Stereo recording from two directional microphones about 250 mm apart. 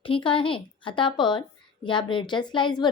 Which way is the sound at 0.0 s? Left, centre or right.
Left.